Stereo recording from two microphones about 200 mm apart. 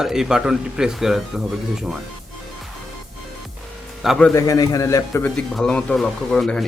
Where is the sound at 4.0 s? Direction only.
Centre (ahead or behind).